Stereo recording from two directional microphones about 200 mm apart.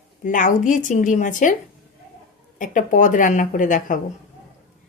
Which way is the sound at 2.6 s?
40° left (ahead or behind).